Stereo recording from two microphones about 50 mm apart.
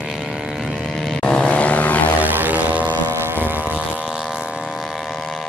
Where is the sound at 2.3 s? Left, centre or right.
Right.